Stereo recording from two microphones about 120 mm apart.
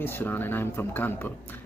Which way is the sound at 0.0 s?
15° left (ahead or behind).